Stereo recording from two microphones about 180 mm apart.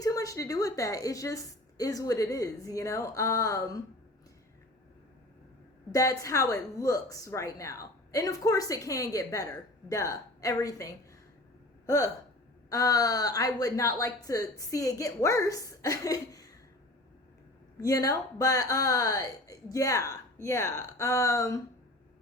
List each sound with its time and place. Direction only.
0.0 s speech: 20° left (ahead or behind)
5.9 s a woman's voice: 20° left (ahead or behind)
17.7 s speech: 20° left (ahead or behind)